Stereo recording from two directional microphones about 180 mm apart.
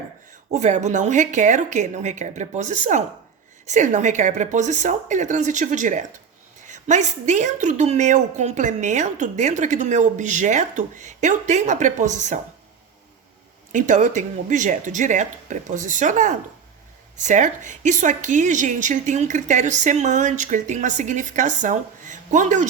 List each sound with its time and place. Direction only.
0.5 s a woman's voice: 40° right (ahead or behind)
13.7 s a woman's voice: 45° right (ahead or behind)